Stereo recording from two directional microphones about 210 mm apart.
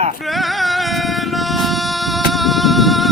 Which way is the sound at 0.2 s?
Centre (ahead or behind).